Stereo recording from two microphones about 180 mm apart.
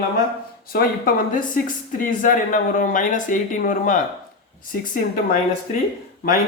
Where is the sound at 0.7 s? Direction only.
55° left (ahead or behind).